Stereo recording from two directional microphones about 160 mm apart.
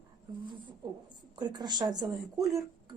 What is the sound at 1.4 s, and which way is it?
Speech, 25° right (ahead or behind).